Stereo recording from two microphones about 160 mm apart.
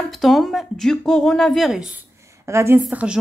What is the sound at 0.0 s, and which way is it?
Speech, centre (ahead or behind).